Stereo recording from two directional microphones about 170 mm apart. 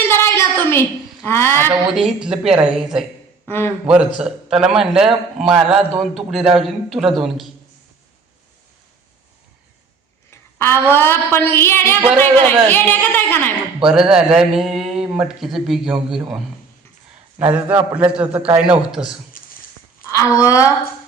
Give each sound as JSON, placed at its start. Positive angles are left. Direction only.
{"t": 0.1, "sound": "a sound", "side_deg": 15}
{"t": 2.0, "sound": "a man's voice", "side_deg": -5}
{"t": 3.4, "sound": "a man's voice", "side_deg": 15}
{"t": 3.8, "sound": "a man's voice", "side_deg": -5}
{"t": 10.3, "sound": "a sound", "side_deg": 15}
{"t": 10.9, "sound": "a woman's voice", "side_deg": 15}
{"t": 13.8, "sound": "a man's voice", "side_deg": -5}
{"t": 17.3, "sound": "a man's voice", "side_deg": -10}
{"t": 19.3, "sound": "dog", "side_deg": 55}
{"t": 20.1, "sound": "speech", "side_deg": 15}